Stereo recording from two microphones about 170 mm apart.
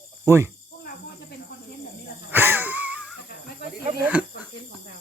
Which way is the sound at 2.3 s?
10° right (ahead or behind).